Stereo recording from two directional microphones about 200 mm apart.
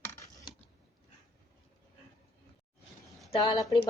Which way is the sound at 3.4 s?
20° left (ahead or behind).